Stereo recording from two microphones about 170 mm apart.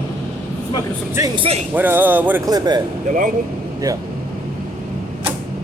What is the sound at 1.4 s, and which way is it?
Speech, 35° right (ahead or behind).